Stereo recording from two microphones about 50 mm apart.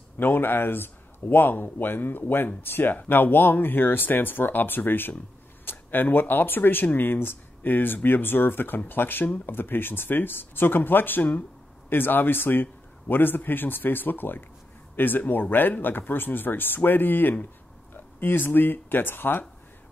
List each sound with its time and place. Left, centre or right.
0.2 s speech: left